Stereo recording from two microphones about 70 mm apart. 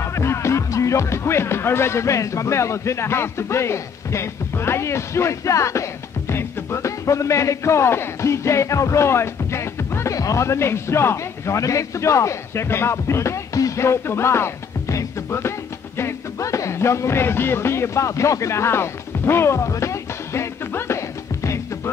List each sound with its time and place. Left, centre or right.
0.1 s speech: left
10.1 s a man's voice: left
16.0 s music: left